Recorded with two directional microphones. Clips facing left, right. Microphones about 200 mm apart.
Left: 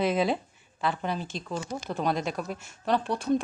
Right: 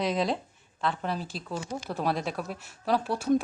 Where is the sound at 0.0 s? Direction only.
Centre (ahead or behind).